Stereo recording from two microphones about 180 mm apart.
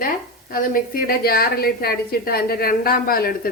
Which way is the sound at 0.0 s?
55° left (ahead or behind).